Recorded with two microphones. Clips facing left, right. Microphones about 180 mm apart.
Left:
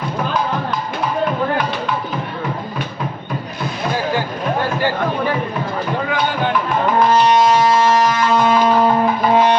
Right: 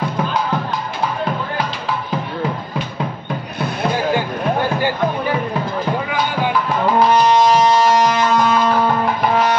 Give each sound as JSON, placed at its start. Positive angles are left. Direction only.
{"t": 9.3, "sound": "music", "side_deg": 25}